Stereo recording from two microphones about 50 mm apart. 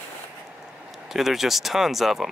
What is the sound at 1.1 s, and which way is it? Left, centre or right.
Speech, centre.